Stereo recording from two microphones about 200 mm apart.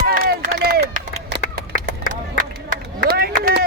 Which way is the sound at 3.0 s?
50° right (ahead or behind).